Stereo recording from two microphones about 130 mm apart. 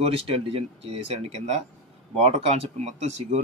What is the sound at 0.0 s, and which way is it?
Speech, 50° right (ahead or behind).